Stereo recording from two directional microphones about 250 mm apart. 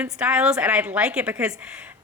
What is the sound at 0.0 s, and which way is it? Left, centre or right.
A woman's voice, centre.